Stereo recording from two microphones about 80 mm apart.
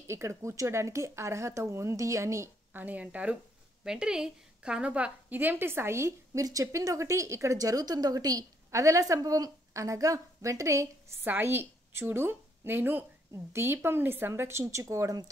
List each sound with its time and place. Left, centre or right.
0.0 s a woman's voice: right
2.7 s a woman's voice: right
7.5 s a woman's voice: right
11.2 s a woman's voice: right